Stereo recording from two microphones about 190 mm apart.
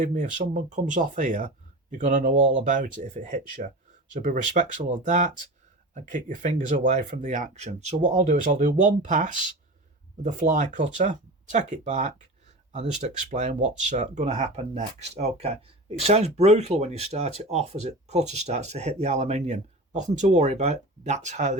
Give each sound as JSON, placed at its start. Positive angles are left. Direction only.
{"t": 0.0, "sound": "speech", "side_deg": -40}